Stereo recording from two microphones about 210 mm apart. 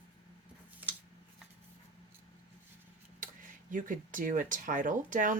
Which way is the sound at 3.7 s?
40° right (ahead or behind).